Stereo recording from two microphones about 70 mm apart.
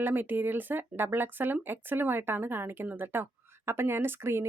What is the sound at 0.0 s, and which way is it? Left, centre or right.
A woman's voice, right.